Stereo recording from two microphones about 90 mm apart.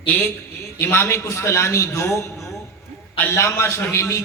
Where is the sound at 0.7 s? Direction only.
25° left (ahead or behind).